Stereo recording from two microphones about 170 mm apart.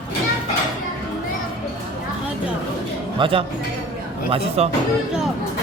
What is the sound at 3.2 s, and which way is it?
Speech, 30° right (ahead or behind).